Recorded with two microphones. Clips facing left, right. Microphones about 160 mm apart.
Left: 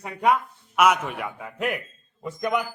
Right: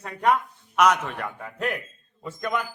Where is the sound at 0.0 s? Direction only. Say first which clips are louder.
Left 1 dB; 10° left (ahead or behind).